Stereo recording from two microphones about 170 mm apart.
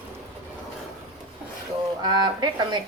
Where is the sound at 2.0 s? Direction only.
25° right (ahead or behind).